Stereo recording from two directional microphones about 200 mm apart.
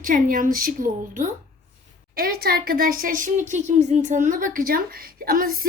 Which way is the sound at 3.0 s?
40° right (ahead or behind).